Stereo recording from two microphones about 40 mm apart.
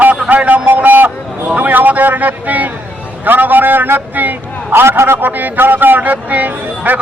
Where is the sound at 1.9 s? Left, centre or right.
Right.